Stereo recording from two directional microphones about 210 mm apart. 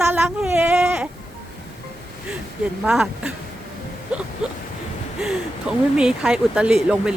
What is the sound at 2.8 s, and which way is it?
Speech, 5° right (ahead or behind).